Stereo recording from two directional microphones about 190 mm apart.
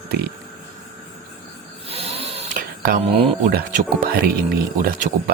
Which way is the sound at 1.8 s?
30° right (ahead or behind).